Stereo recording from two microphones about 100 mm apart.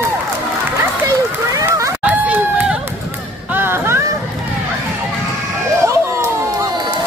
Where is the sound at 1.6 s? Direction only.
30° right (ahead or behind).